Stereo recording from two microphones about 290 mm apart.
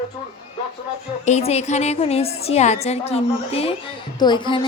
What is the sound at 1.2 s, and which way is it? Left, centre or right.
A woman's voice, left.